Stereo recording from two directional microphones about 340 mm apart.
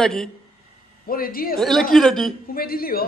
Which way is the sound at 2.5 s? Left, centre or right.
Left.